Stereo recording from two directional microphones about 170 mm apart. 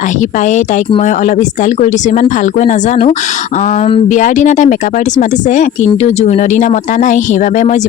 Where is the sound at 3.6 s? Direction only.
45° left (ahead or behind).